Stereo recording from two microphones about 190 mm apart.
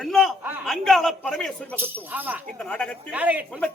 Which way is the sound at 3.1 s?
10° right (ahead or behind).